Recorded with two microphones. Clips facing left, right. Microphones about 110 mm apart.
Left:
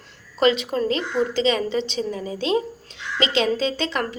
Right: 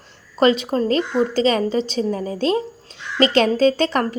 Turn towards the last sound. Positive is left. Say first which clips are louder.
# right 7 dB
turn(degrees=-45)  # may be behind; listen again after turning